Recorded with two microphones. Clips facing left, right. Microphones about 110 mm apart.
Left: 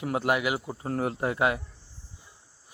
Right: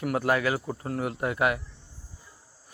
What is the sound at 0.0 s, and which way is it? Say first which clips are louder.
Speech: right 1 dB; 20° left (ahead or behind).